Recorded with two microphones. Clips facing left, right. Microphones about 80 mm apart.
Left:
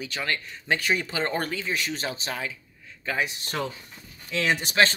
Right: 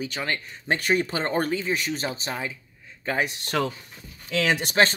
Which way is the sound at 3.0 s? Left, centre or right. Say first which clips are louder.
Right 2 dB; right.